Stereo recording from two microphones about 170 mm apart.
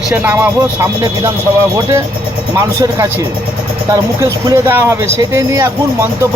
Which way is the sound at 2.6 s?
20° right (ahead or behind).